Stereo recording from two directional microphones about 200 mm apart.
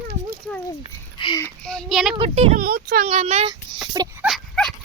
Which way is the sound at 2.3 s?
35° right (ahead or behind).